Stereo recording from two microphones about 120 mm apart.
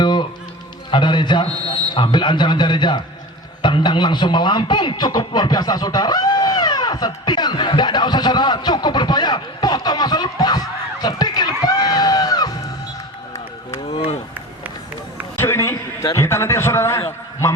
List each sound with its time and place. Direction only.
0.0 s music: 40° left (ahead or behind)
0.9 s a man's voice: 40° left (ahead or behind)
13.9 s run: 50° left (ahead or behind)
15.4 s a sound: 20° left (ahead or behind)
16.1 s speech: 25° left (ahead or behind)